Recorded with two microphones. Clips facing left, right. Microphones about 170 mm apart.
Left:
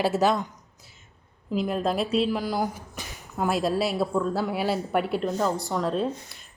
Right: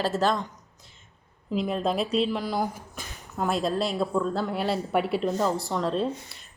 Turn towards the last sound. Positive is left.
turn(degrees=0)  # may be behind; listen again after turning